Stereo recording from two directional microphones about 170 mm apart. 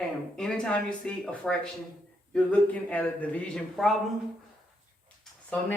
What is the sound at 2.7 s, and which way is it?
A man's voice, 10° left (ahead or behind).